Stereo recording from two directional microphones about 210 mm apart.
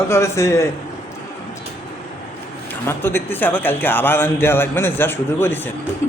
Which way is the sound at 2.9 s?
10° left (ahead or behind).